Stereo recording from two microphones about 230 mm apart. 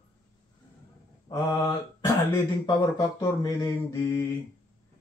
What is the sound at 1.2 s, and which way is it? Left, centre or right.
Mantra, centre.